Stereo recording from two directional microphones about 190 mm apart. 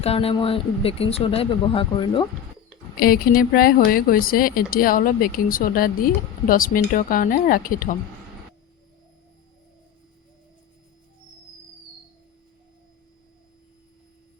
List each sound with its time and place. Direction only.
0.0 s speech: 30° left (ahead or behind)
3.0 s speech: 50° left (ahead or behind)